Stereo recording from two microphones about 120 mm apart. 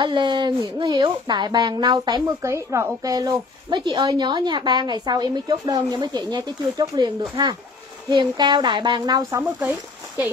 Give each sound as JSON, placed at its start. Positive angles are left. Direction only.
{"t": 0.0, "sound": "speech", "side_deg": -40}
{"t": 2.4, "sound": "speech", "side_deg": -20}
{"t": 9.7, "sound": "speech", "side_deg": -15}